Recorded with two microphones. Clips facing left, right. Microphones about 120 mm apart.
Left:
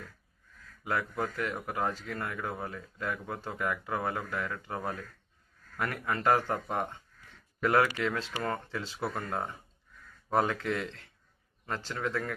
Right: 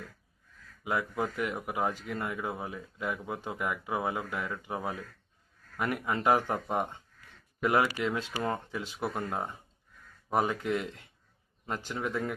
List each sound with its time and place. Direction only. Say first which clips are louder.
0.9 s speech: right 1 dB; 15° right (ahead or behind)